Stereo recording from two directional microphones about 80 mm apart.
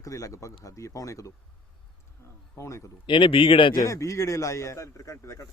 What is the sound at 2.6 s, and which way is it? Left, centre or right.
Speech, left.